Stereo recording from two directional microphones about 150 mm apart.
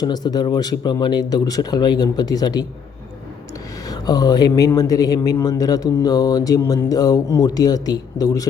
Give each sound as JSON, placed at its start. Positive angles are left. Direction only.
{"t": 0.0, "sound": "speech", "side_deg": 25}
{"t": 3.8, "sound": "speech", "side_deg": 25}